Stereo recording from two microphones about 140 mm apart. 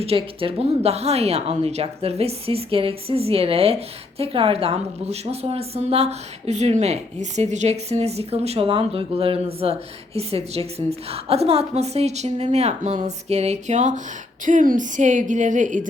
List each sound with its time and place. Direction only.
0.0 s speech: 40° right (ahead or behind); by 14.0 s 60° right (ahead or behind)
14.4 s a woman's voice: 70° right (ahead or behind)